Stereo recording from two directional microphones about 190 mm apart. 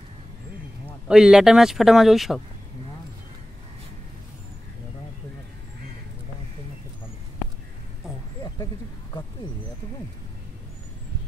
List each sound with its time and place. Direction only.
1.0 s speech: 5° right (ahead or behind)